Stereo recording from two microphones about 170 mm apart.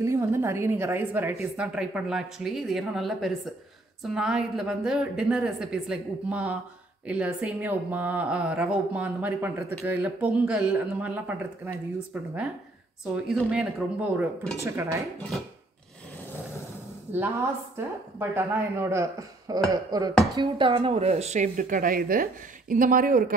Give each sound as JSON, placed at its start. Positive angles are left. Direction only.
{"t": 0.0, "sound": "a woman's voice", "side_deg": -15}
{"t": 18.3, "sound": "a woman's voice", "side_deg": -10}
{"t": 19.7, "sound": "a sound", "side_deg": -20}
{"t": 20.3, "sound": "speech", "side_deg": -30}